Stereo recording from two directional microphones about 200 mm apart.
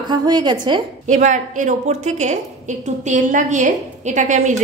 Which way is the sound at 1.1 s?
40° right (ahead or behind).